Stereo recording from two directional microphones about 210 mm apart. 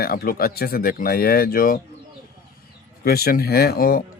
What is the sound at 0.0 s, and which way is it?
Speech, 45° left (ahead or behind).